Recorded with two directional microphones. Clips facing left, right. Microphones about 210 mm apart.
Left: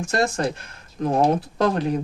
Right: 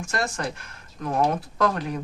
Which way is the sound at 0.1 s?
25° left (ahead or behind).